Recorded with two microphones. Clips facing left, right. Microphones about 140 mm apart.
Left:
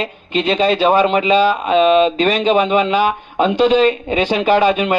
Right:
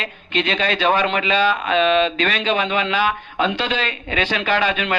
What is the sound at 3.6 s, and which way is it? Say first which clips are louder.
Speech: left 12 dB; 10° left (ahead or behind).